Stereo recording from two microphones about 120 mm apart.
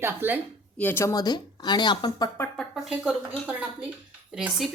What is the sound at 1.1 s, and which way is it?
Speech, 35° left (ahead or behind).